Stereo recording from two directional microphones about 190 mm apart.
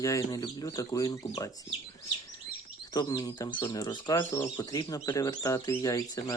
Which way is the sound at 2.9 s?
20° left (ahead or behind).